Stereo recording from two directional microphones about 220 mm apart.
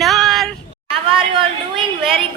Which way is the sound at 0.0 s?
Centre (ahead or behind).